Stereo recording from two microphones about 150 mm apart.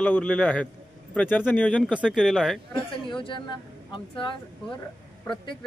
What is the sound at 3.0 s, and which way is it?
Speech, 35° left (ahead or behind).